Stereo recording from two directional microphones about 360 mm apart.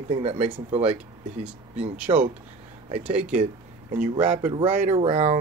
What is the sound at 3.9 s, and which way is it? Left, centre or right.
Speech, centre.